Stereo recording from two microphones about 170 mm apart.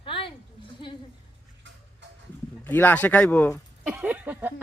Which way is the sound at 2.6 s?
10° left (ahead or behind).